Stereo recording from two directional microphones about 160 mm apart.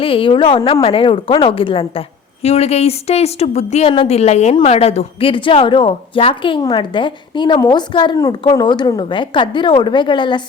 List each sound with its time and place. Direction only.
0.0 s a woman's voice: 35° left (ahead or behind)